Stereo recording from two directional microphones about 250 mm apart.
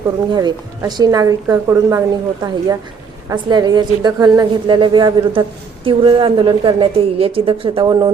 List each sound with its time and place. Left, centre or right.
0.3 s a woman's voice: centre